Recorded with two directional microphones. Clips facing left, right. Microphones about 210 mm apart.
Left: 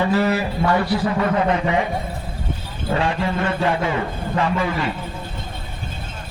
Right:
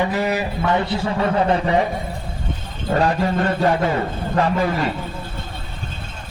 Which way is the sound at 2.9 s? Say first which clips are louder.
Right 3 dB; 40° right (ahead or behind).